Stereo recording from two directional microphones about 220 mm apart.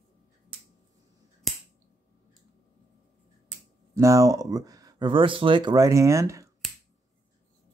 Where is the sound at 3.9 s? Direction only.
15° right (ahead or behind).